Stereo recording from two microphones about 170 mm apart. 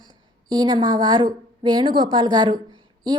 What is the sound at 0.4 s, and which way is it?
A woman's voice, 25° right (ahead or behind).